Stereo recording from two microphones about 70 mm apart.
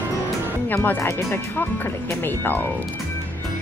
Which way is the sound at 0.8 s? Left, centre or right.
Left.